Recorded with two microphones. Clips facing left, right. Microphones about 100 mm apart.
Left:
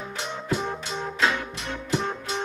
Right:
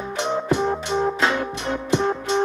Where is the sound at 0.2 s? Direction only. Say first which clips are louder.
Right 8 dB; 30° right (ahead or behind).